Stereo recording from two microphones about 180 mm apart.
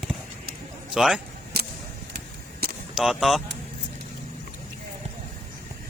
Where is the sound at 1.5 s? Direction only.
60° right (ahead or behind).